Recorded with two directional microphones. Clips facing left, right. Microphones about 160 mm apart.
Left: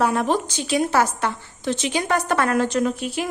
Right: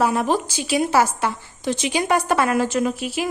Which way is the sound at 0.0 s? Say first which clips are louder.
Right 1 dB; 5° right (ahead or behind).